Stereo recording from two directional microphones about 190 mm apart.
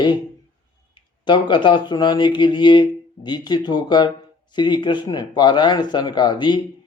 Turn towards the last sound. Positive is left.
turn(degrees=25)  # may be behind; listen again after turning